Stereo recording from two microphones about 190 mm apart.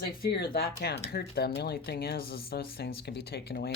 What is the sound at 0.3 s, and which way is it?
Speech, 55° left (ahead or behind).